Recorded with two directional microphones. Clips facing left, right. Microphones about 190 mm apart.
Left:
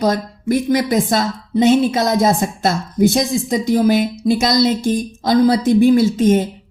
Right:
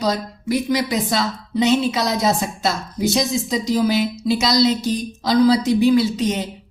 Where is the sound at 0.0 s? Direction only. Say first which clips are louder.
Left 4 dB; 50° left (ahead or behind).